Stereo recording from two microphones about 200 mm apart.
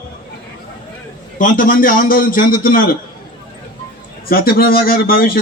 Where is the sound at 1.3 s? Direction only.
40° left (ahead or behind).